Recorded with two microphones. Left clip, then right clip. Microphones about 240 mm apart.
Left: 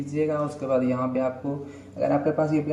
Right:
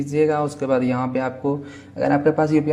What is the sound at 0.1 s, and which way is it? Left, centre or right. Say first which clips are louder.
Speech: right 6 dB; right.